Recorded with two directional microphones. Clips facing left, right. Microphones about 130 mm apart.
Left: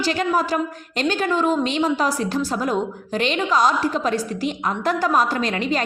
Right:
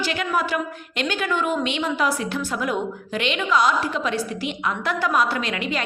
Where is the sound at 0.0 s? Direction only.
35° left (ahead or behind).